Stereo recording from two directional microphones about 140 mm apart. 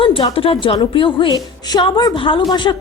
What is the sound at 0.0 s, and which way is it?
A woman's voice, 40° left (ahead or behind).